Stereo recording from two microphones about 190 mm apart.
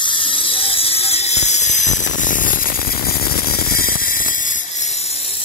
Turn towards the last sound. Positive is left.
turn(degrees=50)  # may be behind; listen again after turning